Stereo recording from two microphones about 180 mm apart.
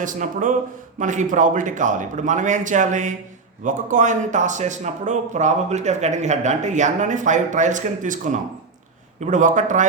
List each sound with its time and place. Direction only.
0.0 s speech: 45° right (ahead or behind)